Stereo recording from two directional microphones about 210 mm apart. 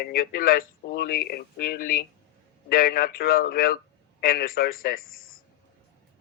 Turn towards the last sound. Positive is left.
turn(degrees=45)  # may be behind; listen again after turning